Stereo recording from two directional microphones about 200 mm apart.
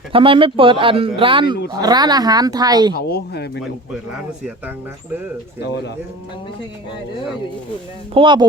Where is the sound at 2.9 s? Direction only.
50° left (ahead or behind).